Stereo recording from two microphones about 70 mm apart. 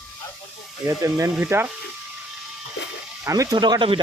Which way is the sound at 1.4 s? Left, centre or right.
Right.